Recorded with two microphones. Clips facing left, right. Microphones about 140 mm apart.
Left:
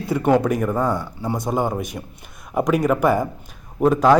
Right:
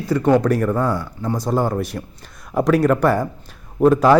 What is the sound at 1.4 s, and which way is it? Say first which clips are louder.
Speech: right 3 dB; 15° left (ahead or behind).